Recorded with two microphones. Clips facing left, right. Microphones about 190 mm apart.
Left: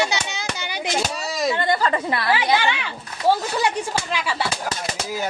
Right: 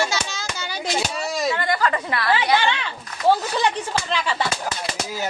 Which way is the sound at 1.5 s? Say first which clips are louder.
Left 1 dB; 25° left (ahead or behind).